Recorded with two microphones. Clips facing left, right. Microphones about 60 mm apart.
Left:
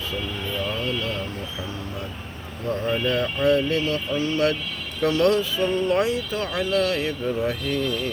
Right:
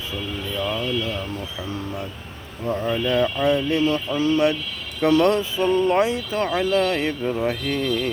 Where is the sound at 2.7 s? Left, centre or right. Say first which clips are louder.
Right 1 dB; right.